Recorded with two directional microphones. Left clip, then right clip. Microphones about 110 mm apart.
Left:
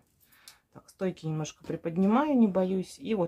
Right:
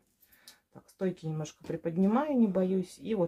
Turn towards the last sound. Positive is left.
turn(degrees=20)  # may be behind; listen again after turning